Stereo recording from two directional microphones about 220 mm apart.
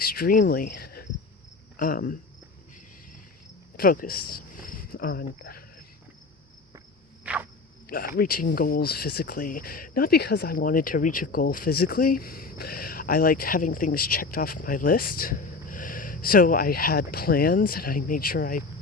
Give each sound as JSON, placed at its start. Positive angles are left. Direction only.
{"t": 0.0, "sound": "speech", "side_deg": 45}
{"t": 1.7, "sound": "cricket", "side_deg": 40}
{"t": 3.8, "sound": "speech", "side_deg": 40}
{"t": 7.9, "sound": "speech", "side_deg": 40}